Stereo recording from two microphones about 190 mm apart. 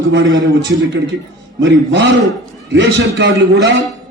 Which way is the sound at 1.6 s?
70° right (ahead or behind).